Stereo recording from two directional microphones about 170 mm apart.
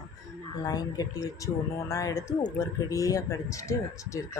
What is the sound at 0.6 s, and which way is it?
Speech, 20° left (ahead or behind).